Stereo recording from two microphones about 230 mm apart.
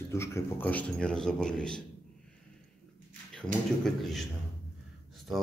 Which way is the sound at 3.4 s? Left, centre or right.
Centre.